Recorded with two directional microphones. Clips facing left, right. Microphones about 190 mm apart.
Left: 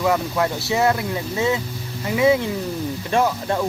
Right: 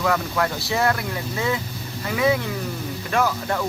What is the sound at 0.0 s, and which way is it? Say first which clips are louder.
Speech: left 2 dB; 20° left (ahead or behind).